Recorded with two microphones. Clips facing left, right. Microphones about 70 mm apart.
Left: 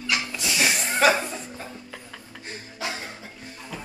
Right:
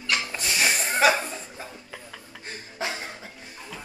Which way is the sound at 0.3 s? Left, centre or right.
Right.